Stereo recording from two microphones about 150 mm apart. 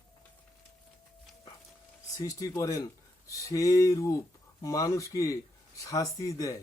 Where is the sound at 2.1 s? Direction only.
20° left (ahead or behind).